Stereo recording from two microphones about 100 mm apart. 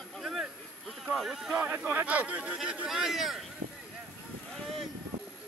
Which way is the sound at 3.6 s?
90° right.